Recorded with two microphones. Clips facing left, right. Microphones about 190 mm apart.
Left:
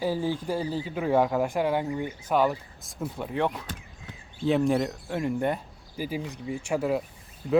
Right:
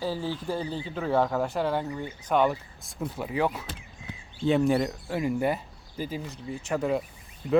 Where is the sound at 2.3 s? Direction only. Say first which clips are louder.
Even; centre (ahead or behind).